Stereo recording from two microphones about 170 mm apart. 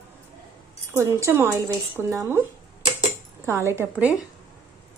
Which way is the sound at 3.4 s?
15° right (ahead or behind).